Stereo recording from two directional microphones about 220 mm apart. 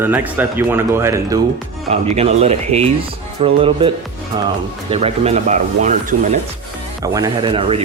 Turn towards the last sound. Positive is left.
turn(degrees=-25)  # may be behind; listen again after turning